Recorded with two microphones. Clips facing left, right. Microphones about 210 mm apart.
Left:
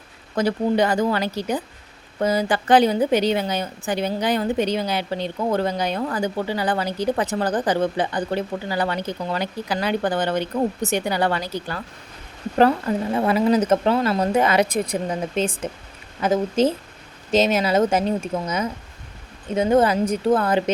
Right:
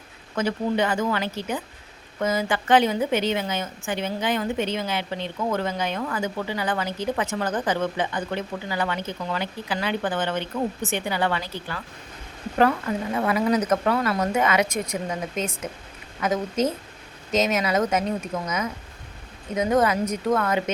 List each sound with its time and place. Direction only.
0.3 s a woman's voice: 35° left (ahead or behind)
13.1 s a woman's voice: 30° left (ahead or behind)